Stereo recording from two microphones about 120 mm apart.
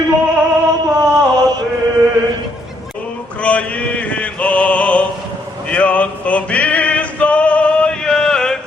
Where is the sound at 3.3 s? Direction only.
10° left (ahead or behind).